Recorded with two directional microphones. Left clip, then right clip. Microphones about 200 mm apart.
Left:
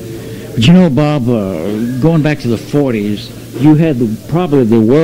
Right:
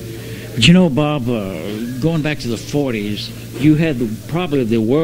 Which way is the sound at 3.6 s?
50° right (ahead or behind).